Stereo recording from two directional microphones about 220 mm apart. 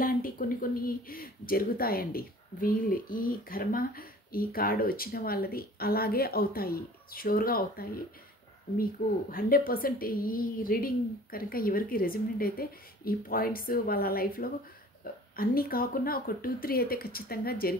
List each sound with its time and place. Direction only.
0.0 s speech: 40° left (ahead or behind)